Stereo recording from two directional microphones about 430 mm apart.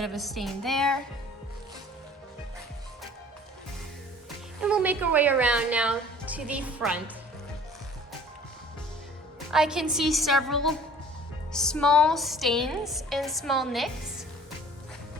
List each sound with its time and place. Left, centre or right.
0.0 s a woman's voice: centre
4.6 s a woman's voice: centre
9.5 s a woman's voice: centre